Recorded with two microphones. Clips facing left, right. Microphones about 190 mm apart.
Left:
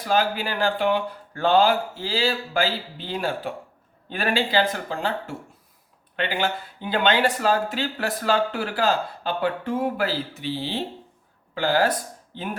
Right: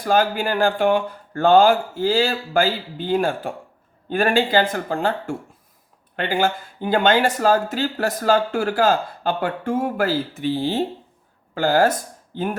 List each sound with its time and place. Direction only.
0.0 s speech: 45° right (ahead or behind)